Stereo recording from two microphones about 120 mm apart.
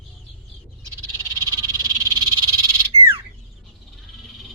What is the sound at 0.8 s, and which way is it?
Frog, 30° right (ahead or behind).